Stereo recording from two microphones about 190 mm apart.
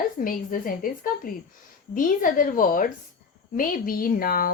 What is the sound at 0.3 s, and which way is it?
A woman's voice, 50° left (ahead or behind).